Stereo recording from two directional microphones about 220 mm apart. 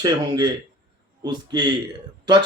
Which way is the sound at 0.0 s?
20° right (ahead or behind).